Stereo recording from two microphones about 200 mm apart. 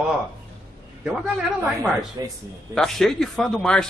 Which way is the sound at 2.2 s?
20° right (ahead or behind).